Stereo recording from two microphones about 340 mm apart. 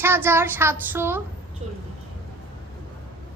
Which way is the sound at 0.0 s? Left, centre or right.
Centre.